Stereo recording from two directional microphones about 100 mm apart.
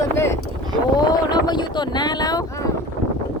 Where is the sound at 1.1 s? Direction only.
45° left (ahead or behind).